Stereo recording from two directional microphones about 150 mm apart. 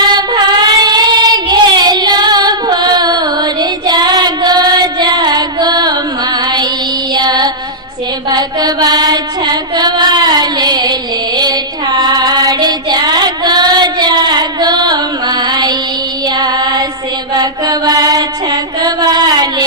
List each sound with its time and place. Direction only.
0.1 s child singing: 30° right (ahead or behind)
7.1 s music: 25° right (ahead or behind)
8.3 s mantra: 25° right (ahead or behind)
11.3 s child singing: 30° right (ahead or behind)
16.2 s music: 25° right (ahead or behind)
17.3 s mantra: 25° right (ahead or behind)